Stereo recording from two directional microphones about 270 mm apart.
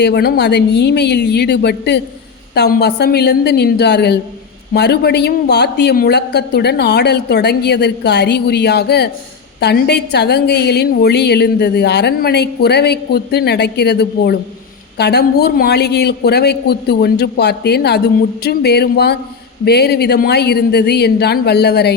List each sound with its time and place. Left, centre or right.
0.0 s a woman's voice: left